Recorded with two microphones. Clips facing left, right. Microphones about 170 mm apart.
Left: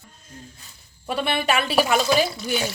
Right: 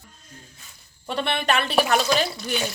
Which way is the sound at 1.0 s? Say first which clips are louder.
Left 1 dB; 5° left (ahead or behind).